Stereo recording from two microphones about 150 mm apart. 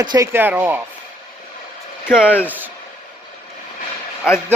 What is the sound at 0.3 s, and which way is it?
Speech, 15° right (ahead or behind).